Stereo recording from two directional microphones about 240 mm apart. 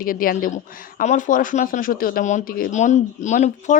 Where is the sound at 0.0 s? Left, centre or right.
Left.